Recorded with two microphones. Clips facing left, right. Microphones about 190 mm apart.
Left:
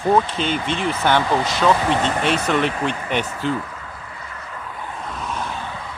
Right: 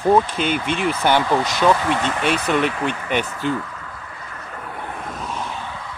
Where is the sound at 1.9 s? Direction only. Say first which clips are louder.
Left 1 dB; 30° left (ahead or behind).